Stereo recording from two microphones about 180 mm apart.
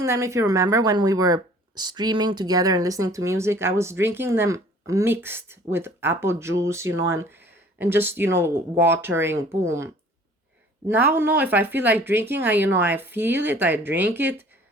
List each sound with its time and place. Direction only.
0.0 s speech: 15° right (ahead or behind)